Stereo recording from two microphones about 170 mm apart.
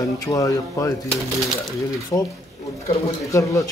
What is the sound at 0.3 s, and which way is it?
Speech, 20° left (ahead or behind).